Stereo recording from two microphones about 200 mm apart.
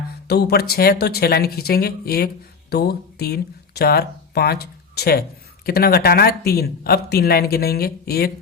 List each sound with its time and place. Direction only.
0.3 s speech: 55° left (ahead or behind)